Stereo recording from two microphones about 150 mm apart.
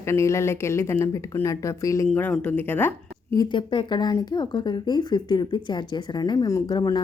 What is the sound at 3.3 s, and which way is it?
Speech, 30° left (ahead or behind).